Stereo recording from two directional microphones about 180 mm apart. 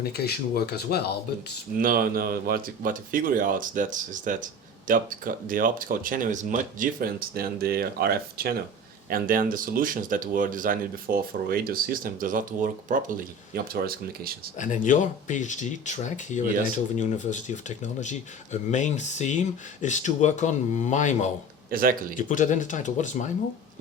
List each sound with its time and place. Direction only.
0.3 s speech: 60° left (ahead or behind)
1.8 s speech: 55° right (ahead or behind)
14.6 s speech: 45° left (ahead or behind)
21.7 s speech: 50° right (ahead or behind)
22.1 s speech: 45° left (ahead or behind)